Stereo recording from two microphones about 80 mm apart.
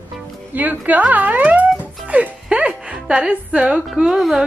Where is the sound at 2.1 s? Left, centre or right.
Centre.